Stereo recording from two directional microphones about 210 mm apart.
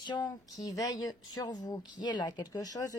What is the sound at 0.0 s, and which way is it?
Speech, 20° left (ahead or behind).